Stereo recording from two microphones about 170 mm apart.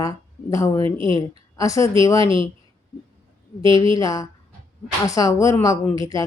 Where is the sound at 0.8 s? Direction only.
30° right (ahead or behind).